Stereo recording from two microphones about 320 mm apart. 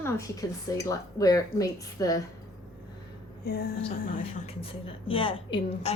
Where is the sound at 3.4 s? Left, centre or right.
Left.